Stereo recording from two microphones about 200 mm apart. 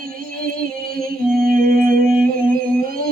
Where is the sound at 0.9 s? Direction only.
45° right (ahead or behind).